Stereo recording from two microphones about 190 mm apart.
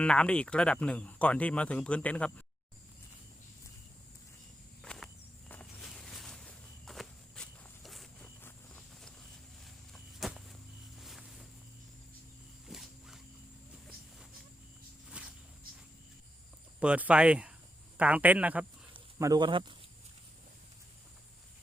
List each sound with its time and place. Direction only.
0.0 s speech: 5° left (ahead or behind)
4.8 s a sound: 5° left (ahead or behind)
5.5 s walk: 5° left (ahead or behind)
8.4 s vehicle: 10° left (ahead or behind)
9.6 s walk: centre (ahead or behind)
10.9 s a sound: centre (ahead or behind)
12.6 s wild animals: centre (ahead or behind)
15.2 s a sound: 5° right (ahead or behind)
16.8 s speech: 5° right (ahead or behind)
18.9 s speech: 20° right (ahead or behind)